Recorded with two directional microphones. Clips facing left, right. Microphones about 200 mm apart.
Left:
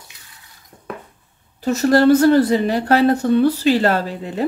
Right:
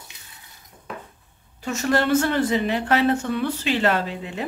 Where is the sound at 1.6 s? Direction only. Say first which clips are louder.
Left 9 dB; 35° left (ahead or behind).